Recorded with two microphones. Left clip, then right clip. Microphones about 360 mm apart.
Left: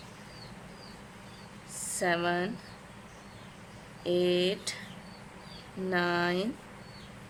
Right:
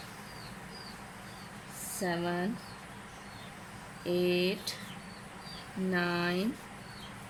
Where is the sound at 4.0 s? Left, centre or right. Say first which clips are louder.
Left 3 dB; centre.